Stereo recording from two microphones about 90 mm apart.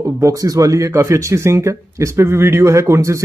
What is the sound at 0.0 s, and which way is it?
Speech, 40° right (ahead or behind).